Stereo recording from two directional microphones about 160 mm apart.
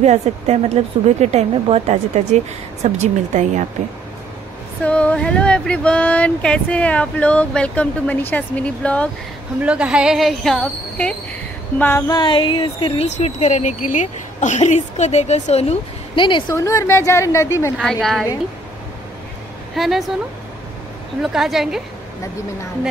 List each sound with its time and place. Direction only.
0.0 s a woman's voice: 45° right (ahead or behind)
4.8 s speech: 10° left (ahead or behind)
9.6 s a woman's voice: 5° right (ahead or behind)
11.8 s speech: 15° left (ahead or behind)
12.2 s speech: 30° left (ahead or behind)
16.5 s speech: 20° left (ahead or behind)
17.7 s a woman's voice: centre (ahead or behind)
19.7 s a woman's voice: centre (ahead or behind)
21.2 s a woman's voice: centre (ahead or behind)